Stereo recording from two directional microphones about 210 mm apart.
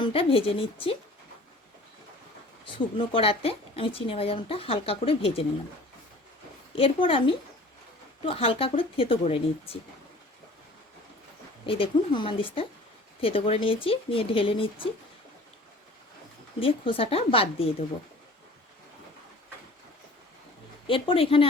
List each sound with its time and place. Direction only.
0.0 s speech: 25° left (ahead or behind)
2.7 s speech: 25° left (ahead or behind)
6.7 s speech: 25° left (ahead or behind)
11.6 s speech: 25° left (ahead or behind)
16.6 s speech: 25° left (ahead or behind)
20.8 s speech: 25° left (ahead or behind)